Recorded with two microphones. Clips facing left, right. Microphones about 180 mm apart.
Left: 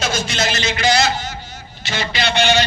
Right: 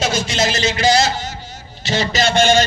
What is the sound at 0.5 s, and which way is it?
A man's voice, 35° right (ahead or behind).